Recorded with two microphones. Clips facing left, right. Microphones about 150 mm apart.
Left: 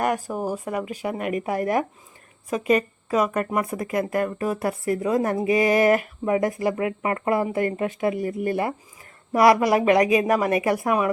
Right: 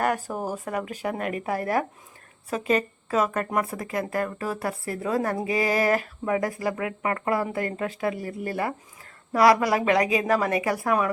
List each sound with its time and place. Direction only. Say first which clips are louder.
0.0 s speech: left 2 dB; 10° left (ahead or behind)